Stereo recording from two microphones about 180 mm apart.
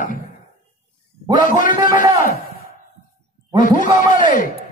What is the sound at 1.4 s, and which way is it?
Speech, 50° left (ahead or behind).